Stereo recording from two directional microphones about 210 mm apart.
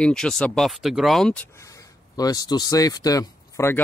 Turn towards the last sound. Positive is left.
turn(degrees=15)  # may be behind; listen again after turning